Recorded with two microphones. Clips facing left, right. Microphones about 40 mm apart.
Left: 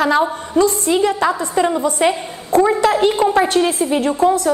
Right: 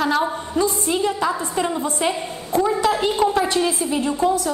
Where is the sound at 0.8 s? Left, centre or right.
Left.